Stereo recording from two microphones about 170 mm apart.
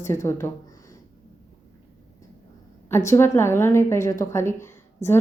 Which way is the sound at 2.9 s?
15° left (ahead or behind).